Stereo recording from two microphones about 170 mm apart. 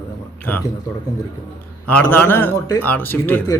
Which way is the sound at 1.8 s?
10° left (ahead or behind).